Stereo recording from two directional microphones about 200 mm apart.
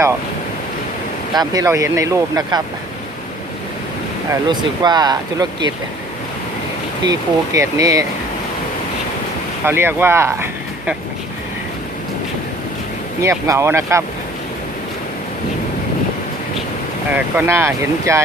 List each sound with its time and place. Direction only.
1.3 s speech: 20° right (ahead or behind)
4.3 s speech: 20° right (ahead or behind)
7.0 s speech: 15° right (ahead or behind)
9.6 s speech: 10° right (ahead or behind)
13.2 s speech: 15° right (ahead or behind)
17.2 s speech: 10° right (ahead or behind)